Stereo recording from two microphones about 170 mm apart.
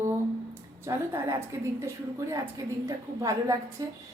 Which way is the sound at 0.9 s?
20° right (ahead or behind).